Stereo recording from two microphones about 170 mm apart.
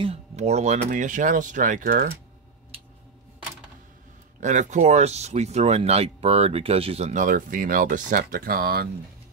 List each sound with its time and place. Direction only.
0.0 s speech: 40° right (ahead or behind); by 2.0 s 55° right (ahead or behind)
4.4 s speech: 45° right (ahead or behind); by 8.8 s 65° right (ahead or behind)